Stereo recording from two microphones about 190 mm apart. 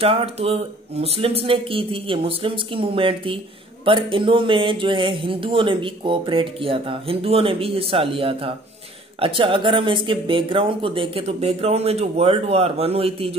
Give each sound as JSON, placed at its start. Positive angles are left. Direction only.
{"t": 0.0, "sound": "speech", "side_deg": -30}